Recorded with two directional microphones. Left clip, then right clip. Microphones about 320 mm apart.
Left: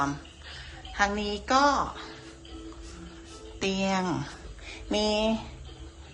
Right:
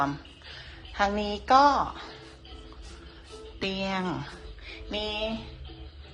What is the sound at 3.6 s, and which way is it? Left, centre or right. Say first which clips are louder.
A woman's voice: left 2 dB; centre.